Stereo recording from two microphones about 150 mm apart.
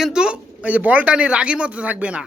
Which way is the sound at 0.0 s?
5° right (ahead or behind).